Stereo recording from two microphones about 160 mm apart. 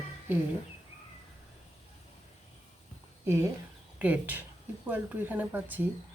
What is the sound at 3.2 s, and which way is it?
Speech, 15° right (ahead or behind).